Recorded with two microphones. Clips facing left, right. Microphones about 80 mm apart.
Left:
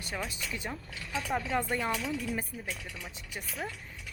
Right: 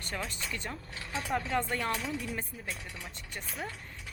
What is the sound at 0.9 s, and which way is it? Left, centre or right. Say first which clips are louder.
Speech: left 1 dB; right.